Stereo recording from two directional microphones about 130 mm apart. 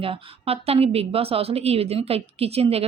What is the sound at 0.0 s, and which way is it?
A woman's voice, 50° right (ahead or behind).